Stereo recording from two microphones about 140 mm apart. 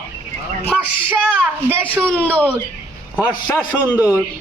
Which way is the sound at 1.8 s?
10° left (ahead or behind).